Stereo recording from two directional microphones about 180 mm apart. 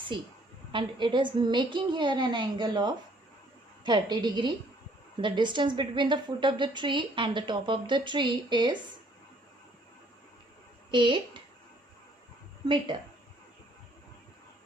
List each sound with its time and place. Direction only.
0.1 s a woman's voice: 25° right (ahead or behind)
10.9 s a woman's voice: 25° right (ahead or behind)
12.6 s a woman's voice: 25° right (ahead or behind)